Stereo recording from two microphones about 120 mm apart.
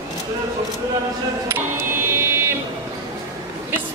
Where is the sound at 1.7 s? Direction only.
20° right (ahead or behind).